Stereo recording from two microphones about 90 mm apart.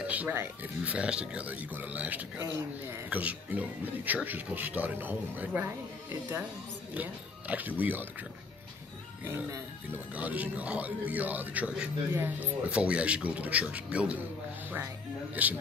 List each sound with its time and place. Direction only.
0.0 s music: 15° right (ahead or behind)
0.3 s speech: 20° right (ahead or behind)
9.2 s speech: 25° right (ahead or behind)
15.4 s speech: 15° right (ahead or behind)